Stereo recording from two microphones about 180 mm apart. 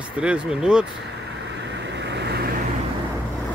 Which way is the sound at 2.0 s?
70° right (ahead or behind).